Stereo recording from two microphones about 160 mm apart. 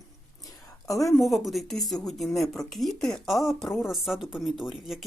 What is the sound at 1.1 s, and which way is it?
Speech, centre (ahead or behind).